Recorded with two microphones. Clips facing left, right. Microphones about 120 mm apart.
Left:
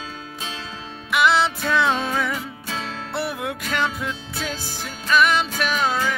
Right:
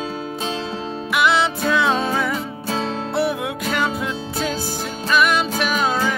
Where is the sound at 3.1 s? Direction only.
Centre (ahead or behind).